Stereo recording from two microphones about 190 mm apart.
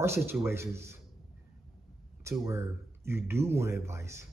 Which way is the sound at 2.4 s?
15° right (ahead or behind).